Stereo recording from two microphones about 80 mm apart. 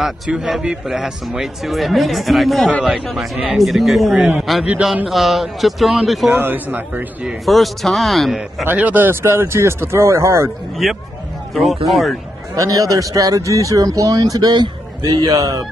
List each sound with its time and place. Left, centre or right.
0.3 s a man's voice: centre
6.4 s a man's voice: right
7.2 s a man's voice: centre
8.6 s speech: right
10.8 s a man's voice: centre
12.5 s a man's voice: right